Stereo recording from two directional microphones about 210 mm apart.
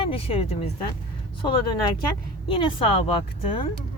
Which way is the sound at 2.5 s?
25° left (ahead or behind).